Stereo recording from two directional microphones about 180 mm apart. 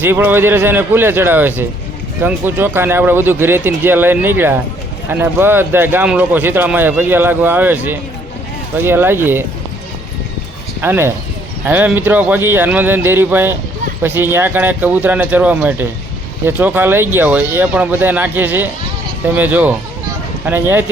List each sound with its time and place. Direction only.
0.0 s speech: 10° right (ahead or behind)
10.8 s speech: 10° right (ahead or behind)